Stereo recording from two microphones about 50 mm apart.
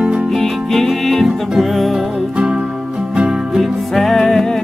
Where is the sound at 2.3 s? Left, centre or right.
Centre.